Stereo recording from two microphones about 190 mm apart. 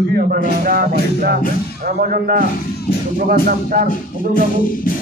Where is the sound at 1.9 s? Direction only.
50° right (ahead or behind).